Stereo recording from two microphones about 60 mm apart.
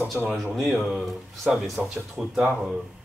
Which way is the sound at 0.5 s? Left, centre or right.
Centre.